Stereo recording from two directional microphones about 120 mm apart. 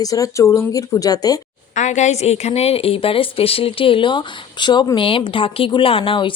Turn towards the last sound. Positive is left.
turn(degrees=45)  # may be behind; listen again after turning